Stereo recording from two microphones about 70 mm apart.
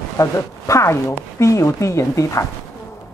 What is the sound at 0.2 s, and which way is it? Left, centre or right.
A woman's voice, left.